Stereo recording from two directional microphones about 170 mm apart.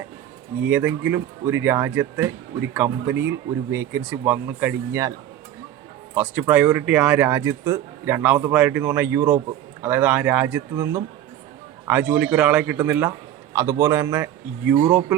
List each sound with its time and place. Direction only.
0.6 s speech: 10° right (ahead or behind)
6.1 s a man's voice: 10° right (ahead or behind)